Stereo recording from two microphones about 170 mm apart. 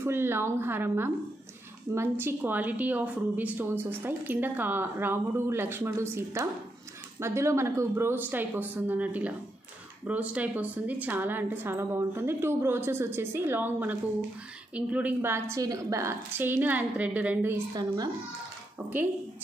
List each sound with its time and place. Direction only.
0.0 s a woman's voice: 15° right (ahead or behind)
17.7 s speech: 20° right (ahead or behind)